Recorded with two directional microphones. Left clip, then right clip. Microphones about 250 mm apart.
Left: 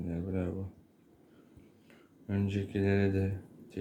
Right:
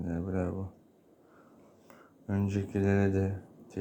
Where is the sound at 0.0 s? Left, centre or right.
Centre.